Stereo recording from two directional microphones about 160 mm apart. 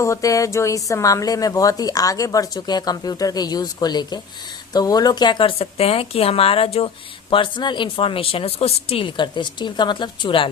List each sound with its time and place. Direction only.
0.0 s speech: 20° left (ahead or behind)